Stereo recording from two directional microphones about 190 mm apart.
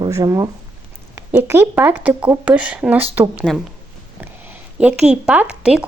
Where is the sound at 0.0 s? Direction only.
15° right (ahead or behind).